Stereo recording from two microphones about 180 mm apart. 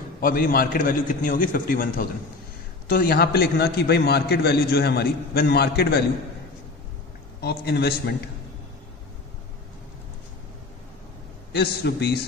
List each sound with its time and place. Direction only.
0.2 s a man's voice: 50° left (ahead or behind)
7.4 s a man's voice: 65° left (ahead or behind)
11.5 s a man's voice: 65° left (ahead or behind)